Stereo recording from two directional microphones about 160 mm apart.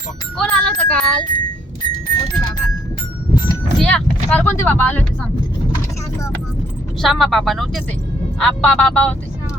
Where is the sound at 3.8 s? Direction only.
5° left (ahead or behind).